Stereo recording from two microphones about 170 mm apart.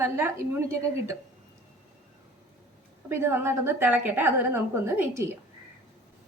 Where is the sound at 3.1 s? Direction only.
15° right (ahead or behind).